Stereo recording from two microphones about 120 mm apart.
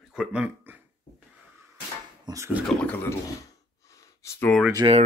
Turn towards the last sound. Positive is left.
turn(degrees=-30)  # may be behind; listen again after turning